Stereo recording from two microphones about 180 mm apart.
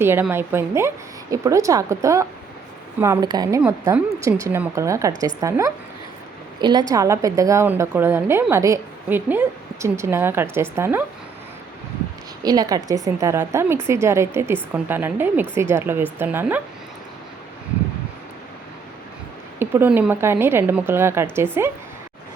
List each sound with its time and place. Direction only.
0.0 s a woman's voice: 10° right (ahead or behind)
12.4 s a woman's voice: 20° right (ahead or behind)
19.5 s a woman's voice: 10° right (ahead or behind)